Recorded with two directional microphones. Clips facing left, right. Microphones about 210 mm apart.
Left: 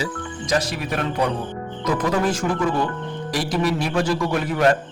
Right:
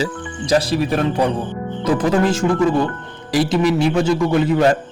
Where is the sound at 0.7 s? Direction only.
30° right (ahead or behind).